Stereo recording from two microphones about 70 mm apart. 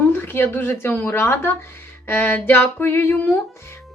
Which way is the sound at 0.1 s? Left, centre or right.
Left.